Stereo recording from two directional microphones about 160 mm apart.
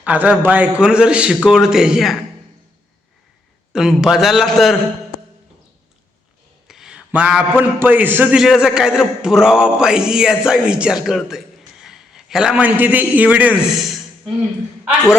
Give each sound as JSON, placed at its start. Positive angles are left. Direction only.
{"t": 0.0, "sound": "a man's voice", "side_deg": -10}
{"t": 3.7, "sound": "a man's voice", "side_deg": -5}
{"t": 6.7, "sound": "a sound", "side_deg": -5}
{"t": 7.6, "sound": "a man's voice", "side_deg": -10}